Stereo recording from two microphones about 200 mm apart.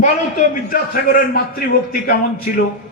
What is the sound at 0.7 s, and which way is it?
Speech, 45° left (ahead or behind).